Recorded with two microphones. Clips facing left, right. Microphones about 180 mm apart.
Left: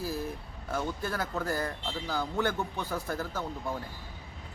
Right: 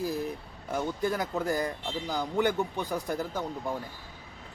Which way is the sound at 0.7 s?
15° right (ahead or behind).